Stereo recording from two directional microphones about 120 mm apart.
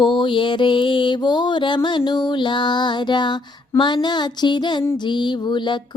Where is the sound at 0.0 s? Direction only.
40° left (ahead or behind).